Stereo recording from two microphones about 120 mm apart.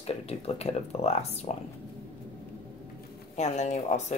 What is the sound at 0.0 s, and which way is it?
Speech, 60° left (ahead or behind).